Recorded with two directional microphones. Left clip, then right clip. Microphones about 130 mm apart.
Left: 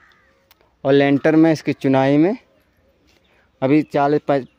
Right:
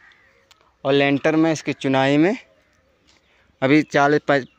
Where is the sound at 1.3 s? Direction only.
45° left (ahead or behind).